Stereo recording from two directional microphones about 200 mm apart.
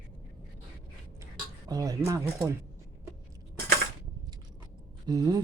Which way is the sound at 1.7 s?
15° right (ahead or behind).